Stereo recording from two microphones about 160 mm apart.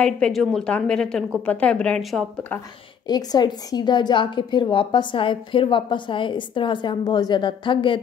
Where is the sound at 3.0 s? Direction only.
25° left (ahead or behind).